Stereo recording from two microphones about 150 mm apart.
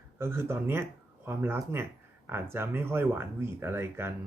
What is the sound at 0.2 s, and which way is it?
Speech, 15° right (ahead or behind).